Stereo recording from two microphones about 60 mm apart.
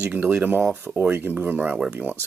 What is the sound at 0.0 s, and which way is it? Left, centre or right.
Speech, right.